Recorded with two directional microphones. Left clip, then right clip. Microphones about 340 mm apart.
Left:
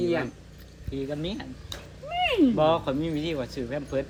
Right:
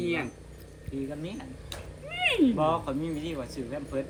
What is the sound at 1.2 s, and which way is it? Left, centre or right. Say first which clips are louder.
Speech: left 6 dB; left.